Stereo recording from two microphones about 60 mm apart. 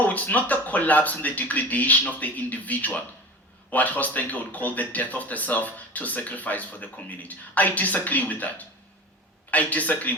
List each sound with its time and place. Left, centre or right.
0.0 s speech: left